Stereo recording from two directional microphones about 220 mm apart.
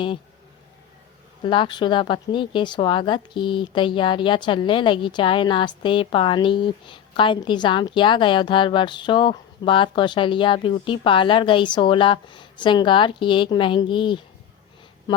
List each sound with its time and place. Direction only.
1.5 s speech: 20° left (ahead or behind)